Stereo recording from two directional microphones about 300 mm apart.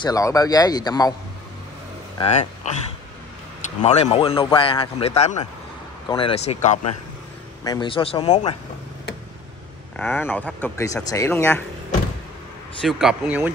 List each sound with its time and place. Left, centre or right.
0.0 s speech: centre
2.1 s speech: left
9.9 s speech: centre
12.8 s speech: centre